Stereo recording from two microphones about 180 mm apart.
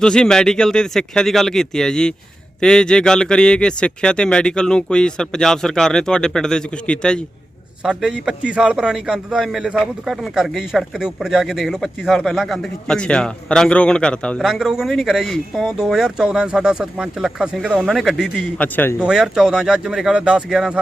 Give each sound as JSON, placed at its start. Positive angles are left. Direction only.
{"t": 0.0, "sound": "a man's voice", "side_deg": 5}
{"t": 18.9, "sound": "a man's voice", "side_deg": -5}